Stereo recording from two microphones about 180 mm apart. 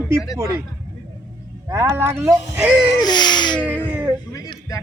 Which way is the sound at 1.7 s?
15° right (ahead or behind).